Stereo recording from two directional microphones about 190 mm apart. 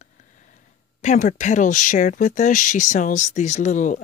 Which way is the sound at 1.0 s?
40° left (ahead or behind).